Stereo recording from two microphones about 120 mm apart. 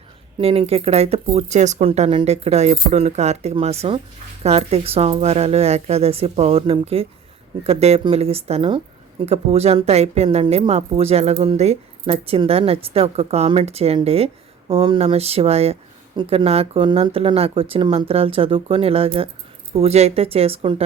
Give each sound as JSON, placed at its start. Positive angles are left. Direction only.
{"t": 0.3, "sound": "speech", "side_deg": -50}
{"t": 1.9, "sound": "speech", "side_deg": -45}
{"t": 2.2, "sound": "speech", "side_deg": -60}